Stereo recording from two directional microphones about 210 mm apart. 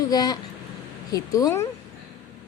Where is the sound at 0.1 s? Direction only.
20° left (ahead or behind).